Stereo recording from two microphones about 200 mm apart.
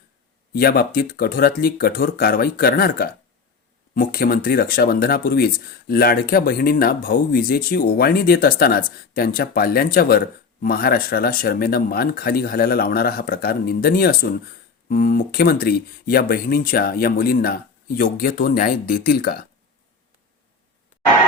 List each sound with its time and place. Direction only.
0.5 s speech: 50° left (ahead or behind)